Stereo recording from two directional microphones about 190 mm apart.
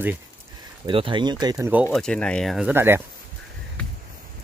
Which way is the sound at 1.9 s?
5° left (ahead or behind).